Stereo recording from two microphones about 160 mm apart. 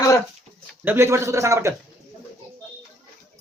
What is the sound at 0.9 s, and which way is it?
Speech, 15° right (ahead or behind).